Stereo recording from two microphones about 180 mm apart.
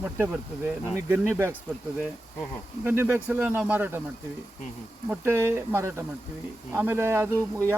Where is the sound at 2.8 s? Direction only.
10° right (ahead or behind).